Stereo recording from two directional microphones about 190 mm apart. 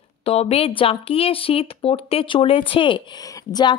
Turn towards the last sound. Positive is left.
turn(degrees=20)  # may be behind; listen again after turning